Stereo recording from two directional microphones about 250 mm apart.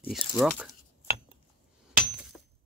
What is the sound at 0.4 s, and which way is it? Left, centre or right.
Speech, centre.